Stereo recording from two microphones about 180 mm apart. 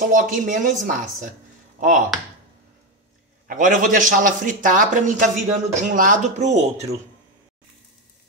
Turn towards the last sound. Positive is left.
turn(degrees=-40)  # may be behind; listen again after turning